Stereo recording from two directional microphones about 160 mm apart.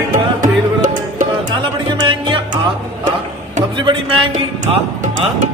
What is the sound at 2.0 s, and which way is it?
Music, 30° right (ahead or behind).